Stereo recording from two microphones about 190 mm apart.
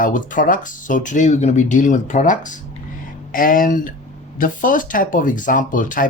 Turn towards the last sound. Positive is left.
turn(degrees=45)  # may be behind; listen again after turning